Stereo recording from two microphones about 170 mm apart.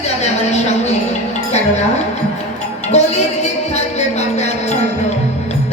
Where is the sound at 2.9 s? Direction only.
40° left (ahead or behind).